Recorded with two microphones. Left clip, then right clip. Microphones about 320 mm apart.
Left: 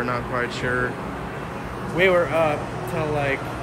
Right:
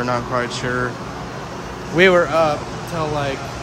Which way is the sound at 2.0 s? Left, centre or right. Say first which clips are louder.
Right 5 dB; right.